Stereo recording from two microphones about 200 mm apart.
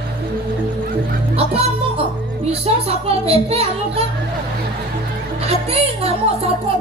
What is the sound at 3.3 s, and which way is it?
Speech, 30° right (ahead or behind).